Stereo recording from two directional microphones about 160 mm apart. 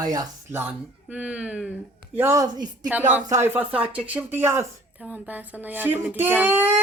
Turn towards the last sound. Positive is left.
turn(degrees=-10)  # may be behind; listen again after turning